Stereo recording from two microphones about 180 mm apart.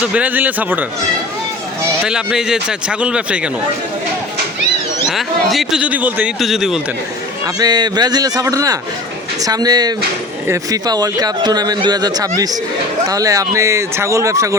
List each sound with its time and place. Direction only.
0.0 s speech: 5° right (ahead or behind)
2.0 s speech: 5° right (ahead or behind)
5.0 s speech: centre (ahead or behind)
7.4 s speech: 20° right (ahead or behind)